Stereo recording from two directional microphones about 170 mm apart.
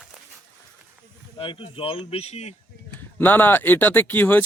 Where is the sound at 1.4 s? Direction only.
30° left (ahead or behind).